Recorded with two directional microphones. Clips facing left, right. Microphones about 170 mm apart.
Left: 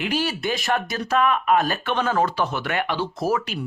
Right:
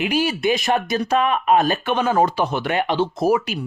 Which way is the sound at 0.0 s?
15° right (ahead or behind).